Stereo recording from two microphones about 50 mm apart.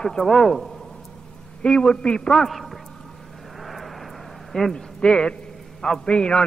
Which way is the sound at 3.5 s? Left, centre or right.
Centre.